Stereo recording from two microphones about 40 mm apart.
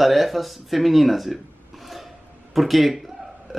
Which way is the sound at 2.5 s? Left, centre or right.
Centre.